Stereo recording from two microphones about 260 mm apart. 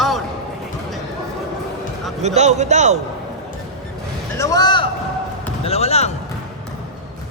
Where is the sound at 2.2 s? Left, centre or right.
Right.